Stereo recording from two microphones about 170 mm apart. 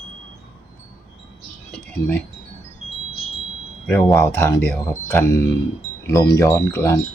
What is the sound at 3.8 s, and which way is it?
Speech, 10° left (ahead or behind).